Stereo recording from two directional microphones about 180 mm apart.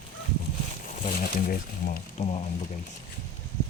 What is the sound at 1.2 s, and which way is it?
Speech, 50° left (ahead or behind).